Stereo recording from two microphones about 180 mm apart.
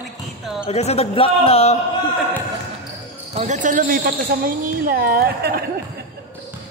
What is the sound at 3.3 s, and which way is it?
Speech, 45° right (ahead or behind).